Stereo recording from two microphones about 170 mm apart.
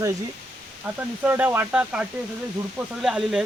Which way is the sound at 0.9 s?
5° right (ahead or behind).